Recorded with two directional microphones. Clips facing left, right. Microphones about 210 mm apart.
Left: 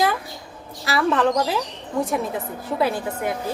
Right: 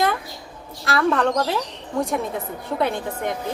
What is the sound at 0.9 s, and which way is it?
A woman's voice, centre (ahead or behind).